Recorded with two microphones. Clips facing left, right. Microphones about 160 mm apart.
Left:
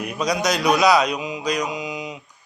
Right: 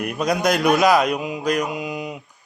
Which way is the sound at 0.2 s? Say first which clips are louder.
Right 2 dB; 50° right (ahead or behind).